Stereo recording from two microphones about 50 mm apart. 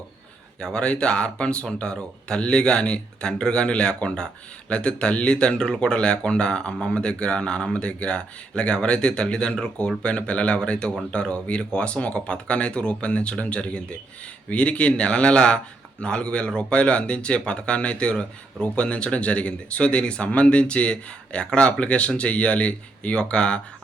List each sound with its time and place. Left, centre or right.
0.6 s speech: centre